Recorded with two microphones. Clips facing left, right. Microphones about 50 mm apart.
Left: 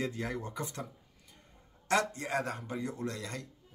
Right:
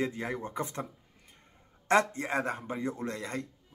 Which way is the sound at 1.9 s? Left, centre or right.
Right.